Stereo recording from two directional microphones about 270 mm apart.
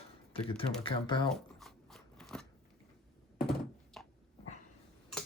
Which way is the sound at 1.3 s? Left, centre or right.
Centre.